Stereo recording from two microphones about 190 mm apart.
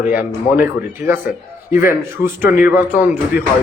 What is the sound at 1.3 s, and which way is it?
Speech, 45° left (ahead or behind).